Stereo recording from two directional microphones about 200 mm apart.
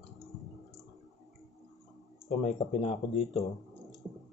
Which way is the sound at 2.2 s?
35° left (ahead or behind).